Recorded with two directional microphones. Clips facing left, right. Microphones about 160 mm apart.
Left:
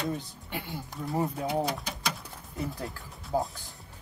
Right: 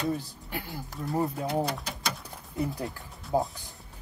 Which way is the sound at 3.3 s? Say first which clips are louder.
Right 2 dB; 20° right (ahead or behind).